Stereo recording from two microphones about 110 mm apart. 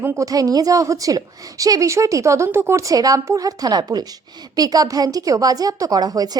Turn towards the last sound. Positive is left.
turn(degrees=-35)  # may be behind; listen again after turning